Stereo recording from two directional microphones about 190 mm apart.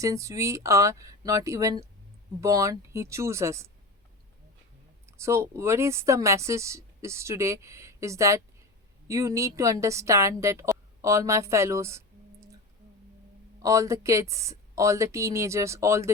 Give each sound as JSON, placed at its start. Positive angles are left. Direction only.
{"t": 0.0, "sound": "speech", "side_deg": -15}
{"t": 5.0, "sound": "speech", "side_deg": -15}
{"t": 13.6, "sound": "speech", "side_deg": -15}